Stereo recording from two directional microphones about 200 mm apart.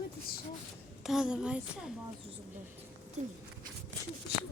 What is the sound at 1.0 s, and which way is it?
Speech, centre (ahead or behind).